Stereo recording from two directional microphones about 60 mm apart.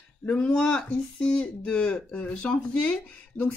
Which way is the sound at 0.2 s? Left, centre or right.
Left.